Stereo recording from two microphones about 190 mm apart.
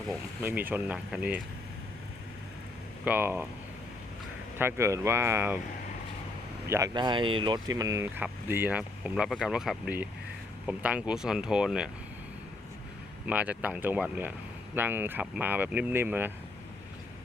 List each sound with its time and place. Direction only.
0.4 s speech: 10° right (ahead or behind)
3.0 s speech: 10° right (ahead or behind)
4.5 s speech: 15° right (ahead or behind)
6.7 s speech: 15° right (ahead or behind)
13.2 s speech: 5° right (ahead or behind)